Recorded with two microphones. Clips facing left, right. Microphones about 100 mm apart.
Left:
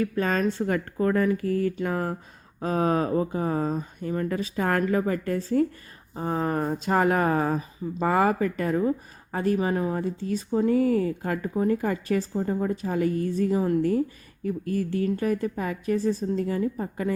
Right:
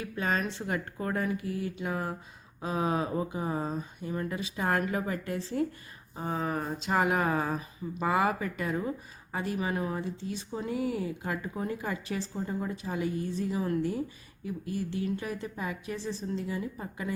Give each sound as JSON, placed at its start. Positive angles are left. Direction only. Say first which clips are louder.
{"t": 0.0, "sound": "speech", "louder": "left 7 dB", "side_deg": 45}
{"t": 14.4, "sound": "speech", "louder": "left 7 dB", "side_deg": 50}